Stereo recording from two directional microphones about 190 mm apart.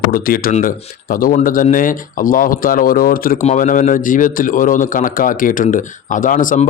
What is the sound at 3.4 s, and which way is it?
A man's voice, 40° left (ahead or behind).